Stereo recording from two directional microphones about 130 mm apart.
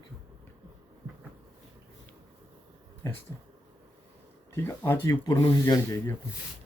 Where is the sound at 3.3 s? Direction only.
25° left (ahead or behind).